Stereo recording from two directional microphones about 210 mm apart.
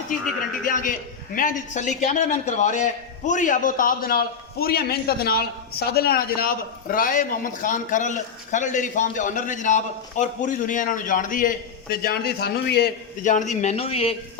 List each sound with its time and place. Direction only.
0.6 s a man's voice: 40° left (ahead or behind)
13.2 s a man's voice: 35° left (ahead or behind)